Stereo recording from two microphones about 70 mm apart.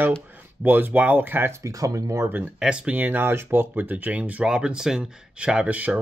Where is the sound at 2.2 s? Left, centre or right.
Right.